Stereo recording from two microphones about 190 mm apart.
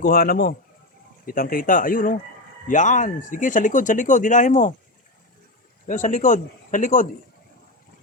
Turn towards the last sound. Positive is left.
turn(degrees=40)  # may be behind; listen again after turning